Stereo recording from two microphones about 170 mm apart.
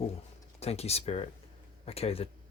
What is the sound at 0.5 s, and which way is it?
Speech, 40° left (ahead or behind).